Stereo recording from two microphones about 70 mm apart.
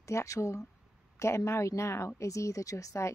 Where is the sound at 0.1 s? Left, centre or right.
Left.